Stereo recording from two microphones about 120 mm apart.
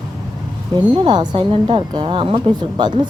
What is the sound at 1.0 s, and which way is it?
A woman's voice, 40° right (ahead or behind).